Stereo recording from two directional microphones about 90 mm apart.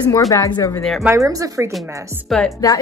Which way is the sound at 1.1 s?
40° right (ahead or behind).